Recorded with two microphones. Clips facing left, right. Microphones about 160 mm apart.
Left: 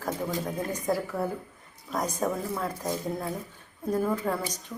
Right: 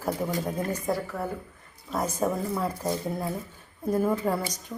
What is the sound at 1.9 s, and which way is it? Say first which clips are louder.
A woman's voice: right 2 dB; 5° right (ahead or behind).